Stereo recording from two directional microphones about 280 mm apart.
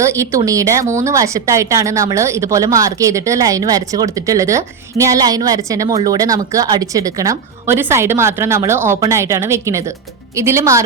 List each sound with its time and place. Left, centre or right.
0.0 s speech: centre